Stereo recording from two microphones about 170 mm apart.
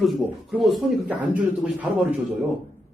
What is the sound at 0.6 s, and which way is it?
Speech, 5° right (ahead or behind).